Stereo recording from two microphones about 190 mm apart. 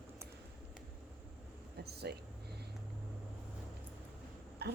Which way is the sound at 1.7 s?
60° right (ahead or behind).